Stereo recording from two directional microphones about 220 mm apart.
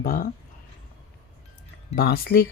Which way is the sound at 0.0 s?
40° left (ahead or behind).